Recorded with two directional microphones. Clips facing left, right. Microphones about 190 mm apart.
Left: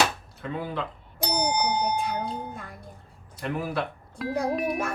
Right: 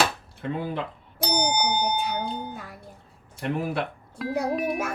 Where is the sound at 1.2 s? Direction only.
Centre (ahead or behind).